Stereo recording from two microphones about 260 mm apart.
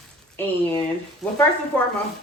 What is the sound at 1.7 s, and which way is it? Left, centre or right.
Speech, centre.